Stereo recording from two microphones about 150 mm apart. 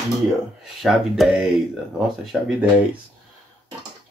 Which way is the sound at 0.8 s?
Centre (ahead or behind).